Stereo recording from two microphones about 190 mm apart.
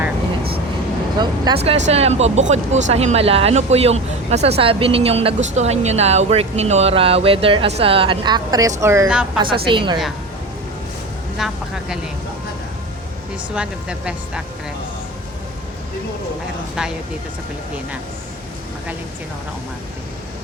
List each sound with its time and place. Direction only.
1.2 s a woman's voice: 25° right (ahead or behind); by 9.4 s 5° right (ahead or behind)
9.6 s a woman's voice: 25° right (ahead or behind)
11.3 s speech: centre (ahead or behind)
13.5 s speech: 5° right (ahead or behind)